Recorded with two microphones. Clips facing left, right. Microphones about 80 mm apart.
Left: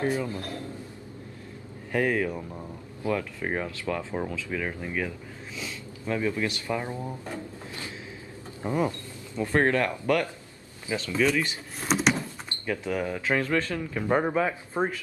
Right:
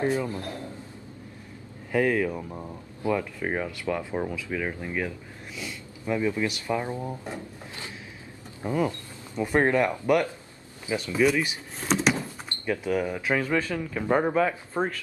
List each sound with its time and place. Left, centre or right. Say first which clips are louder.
0.2 s a man's voice: right 1 dB; centre
1.9 s speech: right 2 dB; centre
2.3 s speech: right 1 dB; centre
3.4 s speech: even; centre
3.8 s speech: right 2 dB; centre
8.6 s speech: right 1 dB; left
9.3 s speech: right 1 dB; centre
11.8 s a sound: even; centre
12.6 s speech: right 2 dB; centre
14.0 s speech: right 2 dB; centre